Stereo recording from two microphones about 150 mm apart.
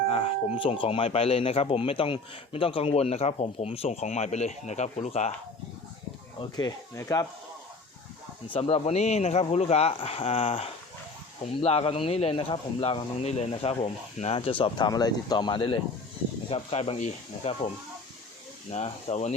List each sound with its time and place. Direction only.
0.1 s speech: 40° left (ahead or behind)
6.4 s speech: 25° left (ahead or behind)
8.5 s speech: 40° left (ahead or behind)
14.6 s speech: 30° left (ahead or behind); by 17.7 s 45° left (ahead or behind)
18.7 s speech: 45° left (ahead or behind)